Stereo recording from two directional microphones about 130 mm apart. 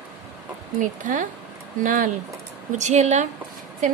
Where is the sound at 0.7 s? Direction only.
75° right (ahead or behind).